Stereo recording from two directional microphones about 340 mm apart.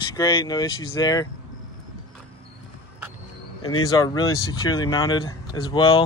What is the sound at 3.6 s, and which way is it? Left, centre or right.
Speech, left.